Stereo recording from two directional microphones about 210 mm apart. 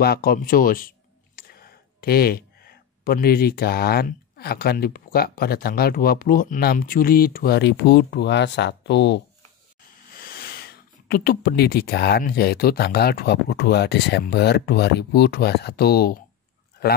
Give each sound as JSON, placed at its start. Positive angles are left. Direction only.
{"t": 0.0, "sound": "speech", "side_deg": 45}
{"t": 10.1, "sound": "a man's voice", "side_deg": 45}